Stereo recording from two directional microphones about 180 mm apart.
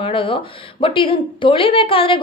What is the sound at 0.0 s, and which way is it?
A woman's voice, 30° left (ahead or behind).